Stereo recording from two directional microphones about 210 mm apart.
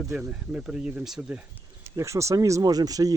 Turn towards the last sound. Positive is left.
turn(degrees=-15)  # may be behind; listen again after turning